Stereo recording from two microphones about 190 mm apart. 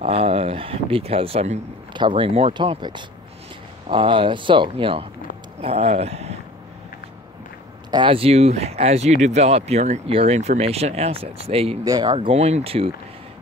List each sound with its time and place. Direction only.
0.0 s speech: 30° right (ahead or behind)
7.9 s speech: 25° right (ahead or behind)
11.8 s speech: 20° right (ahead or behind)